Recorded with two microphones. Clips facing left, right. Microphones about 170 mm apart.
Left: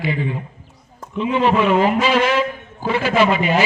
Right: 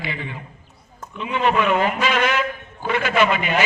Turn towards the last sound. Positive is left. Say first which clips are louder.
# left 3 dB
turn(degrees=35)  # may be behind; listen again after turning